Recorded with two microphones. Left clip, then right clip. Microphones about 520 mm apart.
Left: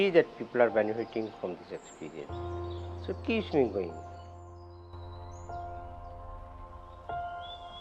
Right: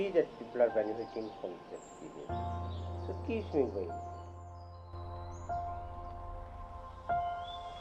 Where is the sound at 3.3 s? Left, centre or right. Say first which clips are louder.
Left 5 dB; left.